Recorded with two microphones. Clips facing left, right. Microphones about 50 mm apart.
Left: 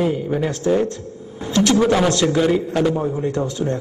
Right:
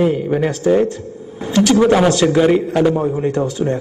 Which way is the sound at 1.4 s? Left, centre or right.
Centre.